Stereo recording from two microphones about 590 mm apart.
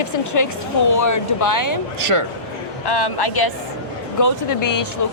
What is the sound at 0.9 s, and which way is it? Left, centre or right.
Speech, left.